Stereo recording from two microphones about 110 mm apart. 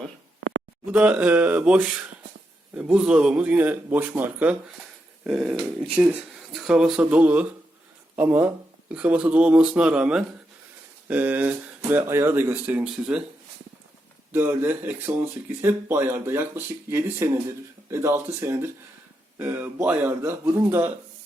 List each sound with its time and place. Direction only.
0.9 s speech: 10° right (ahead or behind)
14.3 s speech: 20° right (ahead or behind)